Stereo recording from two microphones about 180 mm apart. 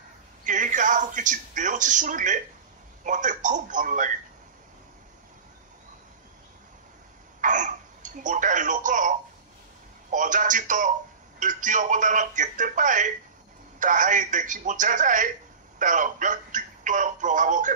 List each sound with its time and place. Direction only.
0.5 s speech: 45° right (ahead or behind)
7.4 s a sound: 45° right (ahead or behind)
10.1 s speech: 45° right (ahead or behind)